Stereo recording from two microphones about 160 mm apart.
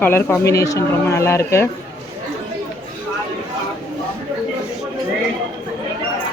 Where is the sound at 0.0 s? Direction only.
15° left (ahead or behind).